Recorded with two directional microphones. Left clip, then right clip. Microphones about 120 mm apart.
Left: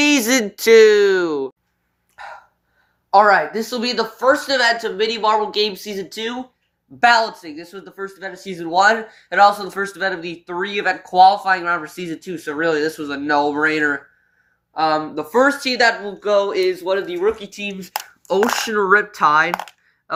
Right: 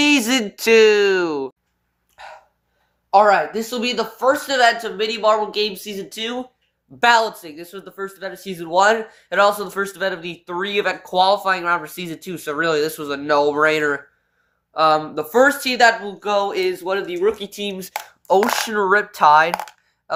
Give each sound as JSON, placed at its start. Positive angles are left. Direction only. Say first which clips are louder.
{"t": 0.0, "sound": "speech", "louder": "left 1 dB", "side_deg": -5}
{"t": 2.2, "sound": "a sound", "louder": "left 3 dB", "side_deg": 10}
{"t": 3.1, "sound": "speech", "louder": "left 1 dB", "side_deg": 0}
{"t": 7.0, "sound": "speech", "louder": "left 1 dB", "side_deg": -25}